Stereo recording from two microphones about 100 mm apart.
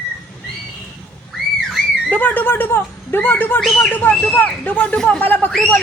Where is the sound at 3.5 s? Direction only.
5° left (ahead or behind).